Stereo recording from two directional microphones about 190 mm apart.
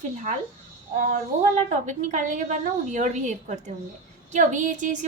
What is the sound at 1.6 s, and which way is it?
A woman's voice, 40° right (ahead or behind).